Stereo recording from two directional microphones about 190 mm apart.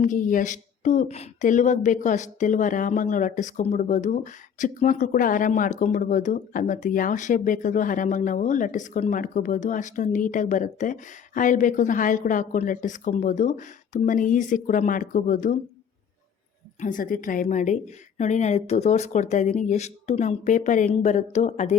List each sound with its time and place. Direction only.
0.0 s speech: 45° left (ahead or behind)
16.8 s a woman's voice: 45° left (ahead or behind)